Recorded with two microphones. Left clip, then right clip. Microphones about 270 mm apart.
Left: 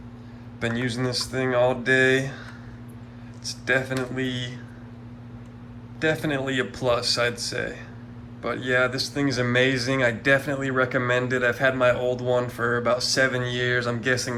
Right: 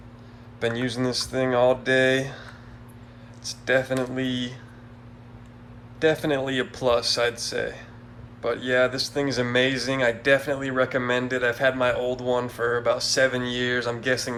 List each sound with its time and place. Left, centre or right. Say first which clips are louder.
0.6 s a man's voice: right 1 dB; centre
3.4 s a man's voice: right 1 dB; centre
6.0 s a man's voice: right 2 dB; centre